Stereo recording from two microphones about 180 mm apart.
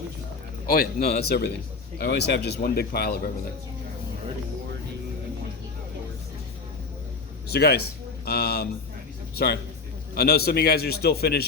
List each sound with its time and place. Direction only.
0.7 s a man's voice: 55° left (ahead or behind)
7.4 s speech: 60° left (ahead or behind)
10.2 s a man's voice: 60° left (ahead or behind)